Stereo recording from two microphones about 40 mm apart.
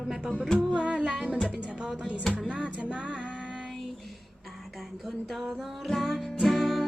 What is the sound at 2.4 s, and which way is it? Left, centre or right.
Music, right.